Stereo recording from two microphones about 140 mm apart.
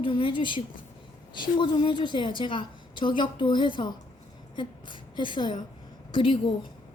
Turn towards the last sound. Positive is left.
turn(degrees=35)  # may be behind; listen again after turning